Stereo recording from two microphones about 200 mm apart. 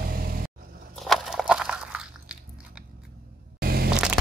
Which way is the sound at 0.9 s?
Centre (ahead or behind).